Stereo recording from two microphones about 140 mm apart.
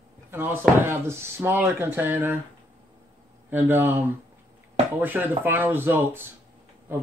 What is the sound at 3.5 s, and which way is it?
Speech, 15° right (ahead or behind).